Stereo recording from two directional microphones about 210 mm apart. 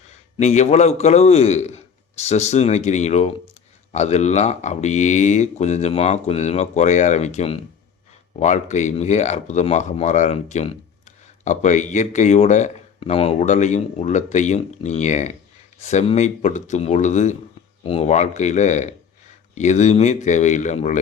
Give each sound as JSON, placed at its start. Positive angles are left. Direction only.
{"t": 0.3, "sound": "speech", "side_deg": 35}